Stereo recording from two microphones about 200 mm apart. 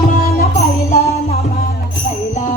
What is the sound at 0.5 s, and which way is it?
Music, 35° left (ahead or behind).